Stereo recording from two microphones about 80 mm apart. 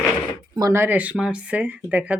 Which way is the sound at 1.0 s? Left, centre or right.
Centre.